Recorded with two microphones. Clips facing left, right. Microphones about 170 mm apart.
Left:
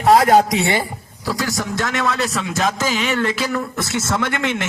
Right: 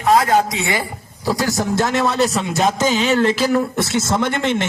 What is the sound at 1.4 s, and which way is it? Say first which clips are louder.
A man's voice: right 4 dB; 30° right (ahead or behind).